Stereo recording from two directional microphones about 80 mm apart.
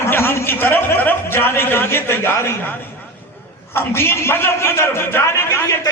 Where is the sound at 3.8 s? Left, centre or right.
Left.